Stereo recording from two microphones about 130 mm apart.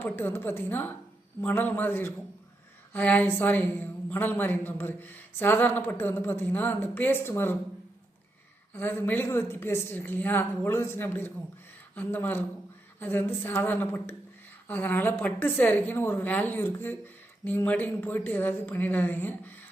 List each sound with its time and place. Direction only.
0.0 s a woman's voice: 15° left (ahead or behind)
8.7 s a woman's voice: 15° left (ahead or behind)